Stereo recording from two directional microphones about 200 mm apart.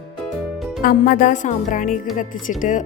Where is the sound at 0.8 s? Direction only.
45° left (ahead or behind).